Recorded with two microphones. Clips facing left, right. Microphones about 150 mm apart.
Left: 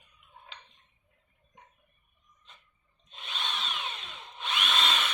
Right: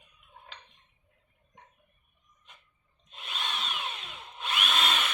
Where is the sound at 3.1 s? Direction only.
5° right (ahead or behind).